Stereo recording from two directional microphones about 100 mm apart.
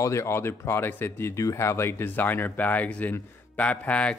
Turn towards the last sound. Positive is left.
turn(degrees=10)  # may be behind; listen again after turning